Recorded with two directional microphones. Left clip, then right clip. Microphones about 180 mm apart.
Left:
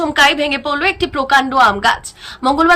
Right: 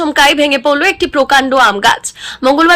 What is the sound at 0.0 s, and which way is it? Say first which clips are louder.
A man's voice: right 3 dB; 20° right (ahead or behind).